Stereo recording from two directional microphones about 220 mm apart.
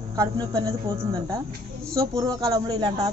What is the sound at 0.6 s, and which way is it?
Speech, 25° right (ahead or behind).